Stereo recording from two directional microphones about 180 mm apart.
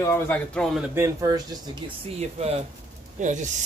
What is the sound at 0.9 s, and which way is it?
Speech, 15° right (ahead or behind).